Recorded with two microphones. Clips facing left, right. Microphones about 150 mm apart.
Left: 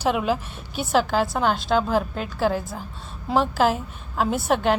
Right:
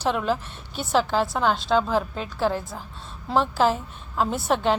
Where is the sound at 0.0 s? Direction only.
5° left (ahead or behind).